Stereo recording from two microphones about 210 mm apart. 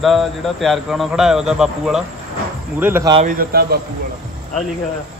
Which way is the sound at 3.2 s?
40° right (ahead or behind).